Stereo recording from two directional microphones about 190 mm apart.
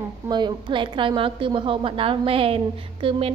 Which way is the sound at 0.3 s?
20° right (ahead or behind).